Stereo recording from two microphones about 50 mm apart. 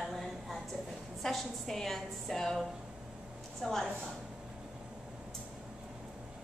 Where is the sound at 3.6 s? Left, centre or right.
Centre.